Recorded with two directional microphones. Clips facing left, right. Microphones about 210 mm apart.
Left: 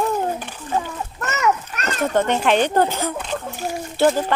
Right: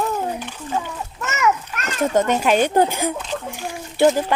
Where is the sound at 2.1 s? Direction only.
10° right (ahead or behind).